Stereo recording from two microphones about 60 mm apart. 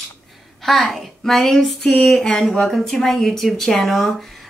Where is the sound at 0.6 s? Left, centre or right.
Centre.